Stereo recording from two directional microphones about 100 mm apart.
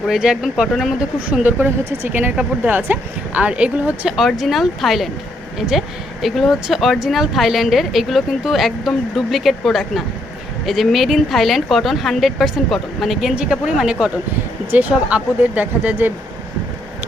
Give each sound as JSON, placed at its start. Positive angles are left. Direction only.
{"t": 0.1, "sound": "speech", "side_deg": -5}
{"t": 1.3, "sound": "speech", "side_deg": -15}